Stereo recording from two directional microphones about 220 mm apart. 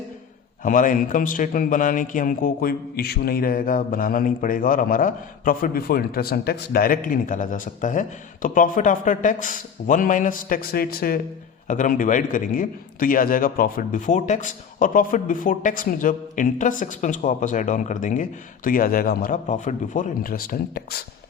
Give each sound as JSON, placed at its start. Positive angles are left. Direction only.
{"t": 0.6, "sound": "a man's voice", "side_deg": 40}